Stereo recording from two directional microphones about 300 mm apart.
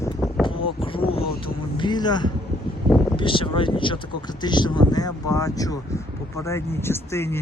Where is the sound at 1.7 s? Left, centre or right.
Centre.